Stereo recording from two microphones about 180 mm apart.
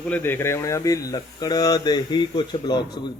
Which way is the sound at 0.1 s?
10° left (ahead or behind).